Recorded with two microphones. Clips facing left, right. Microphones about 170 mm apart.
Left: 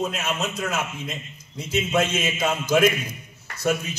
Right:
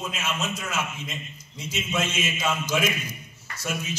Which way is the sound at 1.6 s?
60° left (ahead or behind).